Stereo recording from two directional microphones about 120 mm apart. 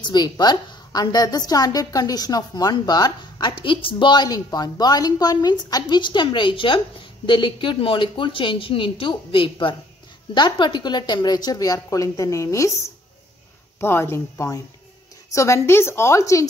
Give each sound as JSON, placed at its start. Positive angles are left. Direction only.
{"t": 0.0, "sound": "a woman's voice", "side_deg": 35}